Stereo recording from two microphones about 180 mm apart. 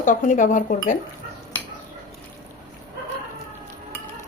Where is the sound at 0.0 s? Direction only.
45° left (ahead or behind).